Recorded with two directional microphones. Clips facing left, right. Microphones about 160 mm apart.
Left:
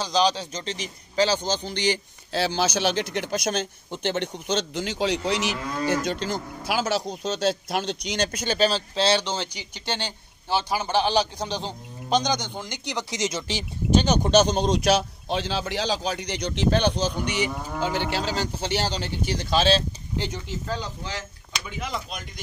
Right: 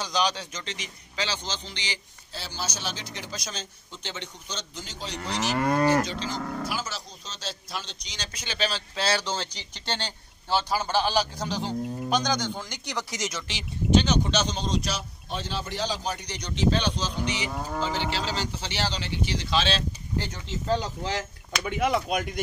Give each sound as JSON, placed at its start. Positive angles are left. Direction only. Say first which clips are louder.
{"t": 0.0, "sound": "speech", "louder": "left 5 dB", "side_deg": 30}
{"t": 2.3, "sound": "speech", "louder": "left 12 dB", "side_deg": 80}
{"t": 5.6, "sound": "speech", "louder": "right 6 dB", "side_deg": -65}
{"t": 6.0, "sound": "speech", "louder": "left 5 dB", "side_deg": 55}
{"t": 6.6, "sound": "speech", "louder": "left 8 dB", "side_deg": 75}
{"t": 21.6, "sound": "speech", "louder": "right 8 dB", "side_deg": -65}